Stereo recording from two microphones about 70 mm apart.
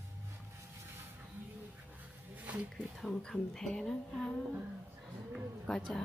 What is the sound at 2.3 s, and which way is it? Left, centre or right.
Music, right.